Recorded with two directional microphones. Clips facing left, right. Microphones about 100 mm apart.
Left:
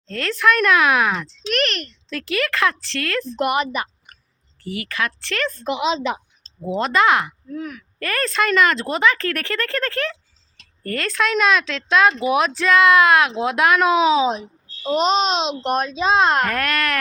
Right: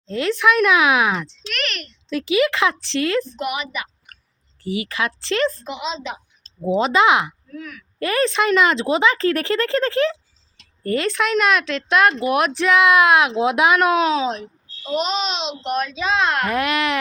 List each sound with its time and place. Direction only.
0.1 s speech: 15° right (ahead or behind)
1.5 s a child's voice: 40° left (ahead or behind)
2.0 s speech: 15° right (ahead or behind)
3.3 s a woman's voice: 45° left (ahead or behind)
4.6 s speech: 20° right (ahead or behind)
5.6 s a woman's voice: 70° left (ahead or behind)
6.7 s speech: 20° right (ahead or behind)
7.5 s a child's voice: 35° left (ahead or behind)
7.9 s speech: 20° right (ahead or behind)
13.7 s speech: centre (ahead or behind)
14.9 s a child's voice: 35° left (ahead or behind)
16.5 s speech: 15° right (ahead or behind)